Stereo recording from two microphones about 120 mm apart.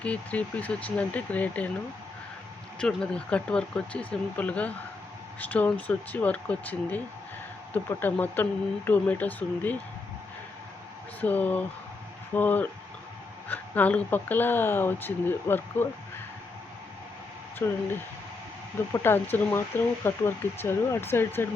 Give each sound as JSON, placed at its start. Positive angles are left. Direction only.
{"t": 0.0, "sound": "speech", "side_deg": 10}
{"t": 2.7, "sound": "speech", "side_deg": 5}
{"t": 11.2, "sound": "speech", "side_deg": 15}
{"t": 17.6, "sound": "speech", "side_deg": 20}
{"t": 18.9, "sound": "speech", "side_deg": 20}